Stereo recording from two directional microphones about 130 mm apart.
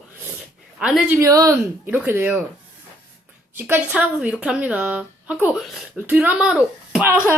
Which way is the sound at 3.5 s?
15° right (ahead or behind).